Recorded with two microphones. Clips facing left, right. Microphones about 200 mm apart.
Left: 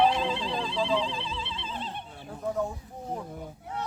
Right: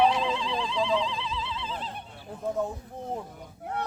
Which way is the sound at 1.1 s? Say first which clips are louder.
Right 2 dB; 30° left (ahead or behind).